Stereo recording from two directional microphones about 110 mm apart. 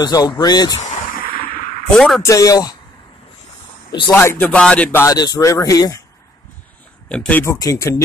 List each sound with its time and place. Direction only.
0.0 s a man's voice: 35° left (ahead or behind)
2.0 s a man's voice: 5° left (ahead or behind)
2.2 s a man's voice: 30° left (ahead or behind)
4.1 s music: 20° left (ahead or behind)
5.0 s a man's voice: 35° left (ahead or behind)
7.1 s music: 10° left (ahead or behind)
7.5 s a man's voice: 35° left (ahead or behind)